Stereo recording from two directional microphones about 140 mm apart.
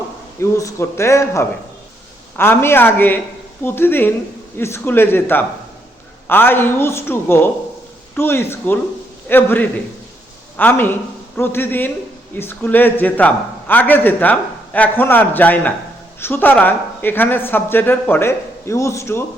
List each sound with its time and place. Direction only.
0.5 s a man's voice: 20° left (ahead or behind)